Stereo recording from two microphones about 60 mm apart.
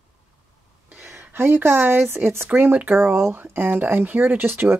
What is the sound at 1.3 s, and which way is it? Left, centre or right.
Speech, right.